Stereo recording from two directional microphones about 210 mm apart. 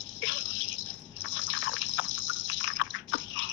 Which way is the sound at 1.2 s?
65° left (ahead or behind).